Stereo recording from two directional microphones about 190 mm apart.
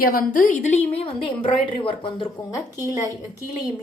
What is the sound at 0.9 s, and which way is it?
A woman's voice, 30° left (ahead or behind).